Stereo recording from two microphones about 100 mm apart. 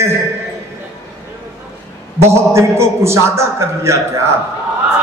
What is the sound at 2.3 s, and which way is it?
A man's voice, 30° right (ahead or behind).